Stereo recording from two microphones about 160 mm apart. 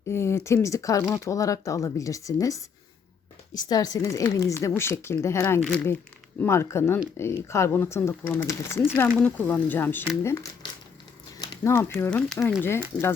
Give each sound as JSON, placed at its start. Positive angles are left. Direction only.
{"t": 0.1, "sound": "a woman's voice", "side_deg": 15}
{"t": 11.3, "sound": "speech", "side_deg": 15}
{"t": 12.3, "sound": "speech", "side_deg": 0}
{"t": 12.6, "sound": "speech", "side_deg": 15}